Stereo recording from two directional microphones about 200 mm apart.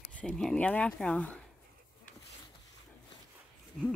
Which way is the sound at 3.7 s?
Centre (ahead or behind).